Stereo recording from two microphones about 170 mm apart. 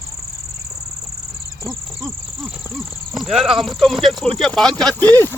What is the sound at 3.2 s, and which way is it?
Speech, centre (ahead or behind).